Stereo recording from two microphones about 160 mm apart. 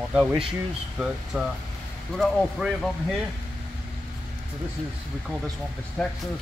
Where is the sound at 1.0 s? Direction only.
Centre (ahead or behind).